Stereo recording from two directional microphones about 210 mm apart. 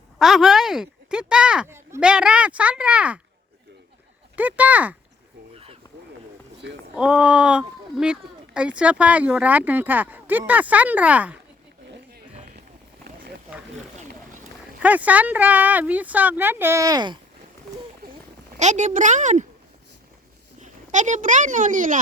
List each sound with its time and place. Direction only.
0.2 s speech: centre (ahead or behind)
4.4 s speech: 5° right (ahead or behind)
6.9 s speech: 5° right (ahead or behind)
14.8 s speech: 5° right (ahead or behind)
18.0 s a sound: 45° right (ahead or behind)
18.6 s speech: 35° right (ahead or behind)
20.6 s speech: 35° right (ahead or behind)